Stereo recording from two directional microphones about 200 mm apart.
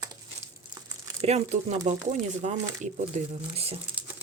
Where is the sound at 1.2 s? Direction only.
35° right (ahead or behind).